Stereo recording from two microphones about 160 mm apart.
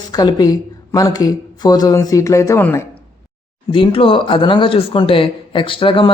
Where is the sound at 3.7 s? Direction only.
35° left (ahead or behind).